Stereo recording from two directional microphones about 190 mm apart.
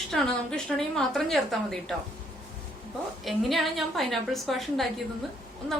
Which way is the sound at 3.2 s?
Centre (ahead or behind).